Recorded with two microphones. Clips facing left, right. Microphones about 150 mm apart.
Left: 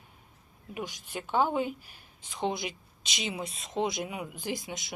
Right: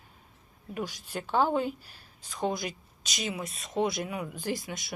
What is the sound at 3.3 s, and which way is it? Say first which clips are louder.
Speech: even; 20° left (ahead or behind).